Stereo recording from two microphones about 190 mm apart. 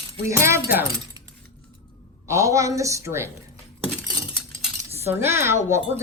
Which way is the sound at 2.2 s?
15° right (ahead or behind).